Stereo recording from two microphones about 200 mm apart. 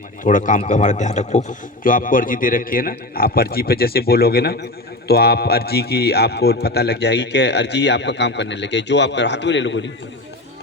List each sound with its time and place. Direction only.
0.3 s a man's voice: 40° left (ahead or behind); by 9.9 s 65° left (ahead or behind)